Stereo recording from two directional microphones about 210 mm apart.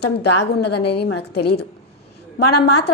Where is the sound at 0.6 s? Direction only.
50° left (ahead or behind).